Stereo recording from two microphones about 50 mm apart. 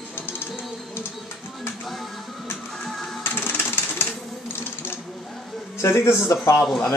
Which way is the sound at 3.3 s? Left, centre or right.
Left.